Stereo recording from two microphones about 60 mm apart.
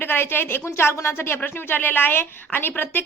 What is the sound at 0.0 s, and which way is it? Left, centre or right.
A woman's voice, left.